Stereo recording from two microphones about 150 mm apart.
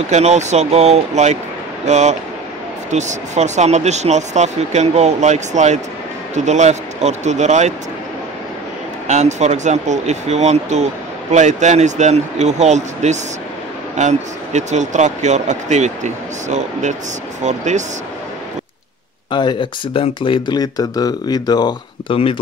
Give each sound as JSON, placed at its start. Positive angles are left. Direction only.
{"t": 0.1, "sound": "speech", "side_deg": -50}
{"t": 9.0, "sound": "speech", "side_deg": -50}
{"t": 19.3, "sound": "speech", "side_deg": 30}